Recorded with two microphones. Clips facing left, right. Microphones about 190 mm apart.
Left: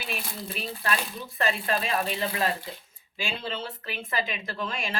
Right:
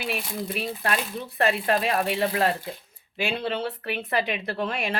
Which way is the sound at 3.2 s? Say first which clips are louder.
Right 6 dB; 60° right (ahead or behind).